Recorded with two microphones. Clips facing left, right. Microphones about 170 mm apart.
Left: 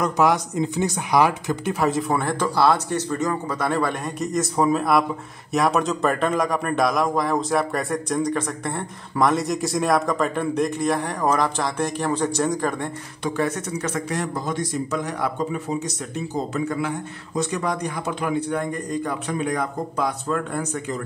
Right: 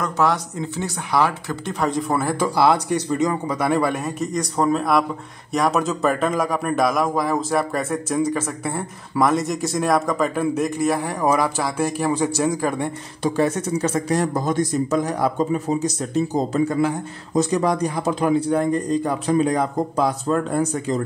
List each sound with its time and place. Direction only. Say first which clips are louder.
0.0 s speech: left 1 dB; 15° left (ahead or behind)
1.8 s a man's voice: right 2 dB; centre (ahead or behind)
13.2 s a man's voice: right 4 dB; 30° right (ahead or behind)
16.3 s a man's voice: right 3 dB; 35° right (ahead or behind)